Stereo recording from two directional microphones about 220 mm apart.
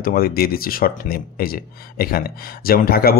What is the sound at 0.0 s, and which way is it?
A man's voice, 45° left (ahead or behind).